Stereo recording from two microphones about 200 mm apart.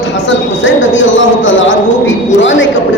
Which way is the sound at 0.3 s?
70° left (ahead or behind).